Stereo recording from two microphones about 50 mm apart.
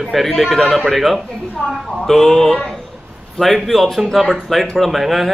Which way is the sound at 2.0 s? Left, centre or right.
Centre.